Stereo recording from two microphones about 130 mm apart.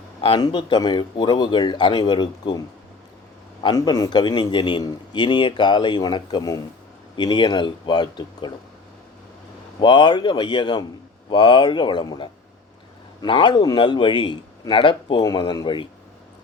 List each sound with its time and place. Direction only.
0.2 s a man's voice: 40° left (ahead or behind)
9.8 s a man's voice: 35° left (ahead or behind)